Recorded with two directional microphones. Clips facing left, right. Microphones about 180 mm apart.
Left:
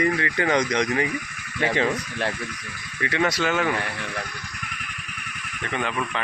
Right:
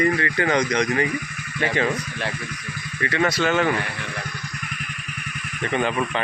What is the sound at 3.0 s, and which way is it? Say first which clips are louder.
Speech: right 2 dB; 15° left (ahead or behind).